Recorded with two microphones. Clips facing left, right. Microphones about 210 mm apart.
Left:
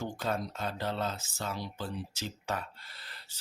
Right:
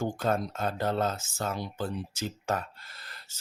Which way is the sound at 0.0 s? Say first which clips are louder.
Right 5 dB; 50° right (ahead or behind).